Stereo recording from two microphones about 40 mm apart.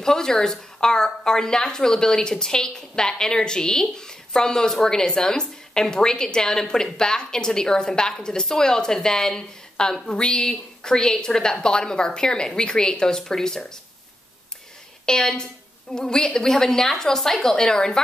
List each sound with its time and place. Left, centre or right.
0.0 s a woman's voice: centre
15.0 s a woman's voice: centre